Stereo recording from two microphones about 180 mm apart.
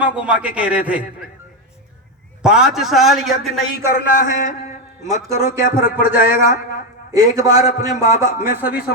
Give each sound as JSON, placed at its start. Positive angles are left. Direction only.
{"t": 0.0, "sound": "a man's voice", "side_deg": -5}
{"t": 2.4, "sound": "a man's voice", "side_deg": -5}
{"t": 3.9, "sound": "a man's voice", "side_deg": 50}
{"t": 5.4, "sound": "a man's voice", "side_deg": -15}
{"t": 7.6, "sound": "a man's voice", "side_deg": 55}
{"t": 7.9, "sound": "a man's voice", "side_deg": -15}